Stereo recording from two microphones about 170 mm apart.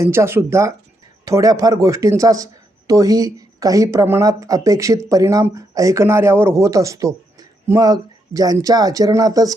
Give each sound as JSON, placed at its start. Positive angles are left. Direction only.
{"t": 0.0, "sound": "a man's voice", "side_deg": -15}